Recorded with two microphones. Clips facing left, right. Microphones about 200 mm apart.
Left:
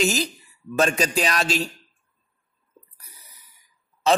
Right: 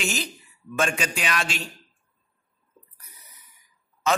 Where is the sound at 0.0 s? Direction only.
40° left (ahead or behind).